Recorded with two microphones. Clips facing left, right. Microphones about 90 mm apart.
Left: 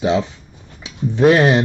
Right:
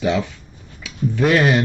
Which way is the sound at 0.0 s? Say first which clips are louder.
Left 2 dB; 25° left (ahead or behind).